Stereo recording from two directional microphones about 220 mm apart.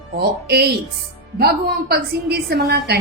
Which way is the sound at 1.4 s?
45° right (ahead or behind).